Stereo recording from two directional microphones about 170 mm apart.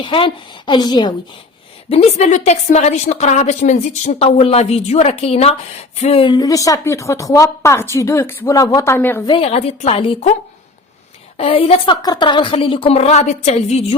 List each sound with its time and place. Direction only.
0.0 s a woman's voice: 30° left (ahead or behind)
1.9 s a woman's voice: 35° left (ahead or behind); by 9.2 s 10° left (ahead or behind)
9.2 s a woman's voice: 30° left (ahead or behind)
11.3 s a woman's voice: 35° left (ahead or behind)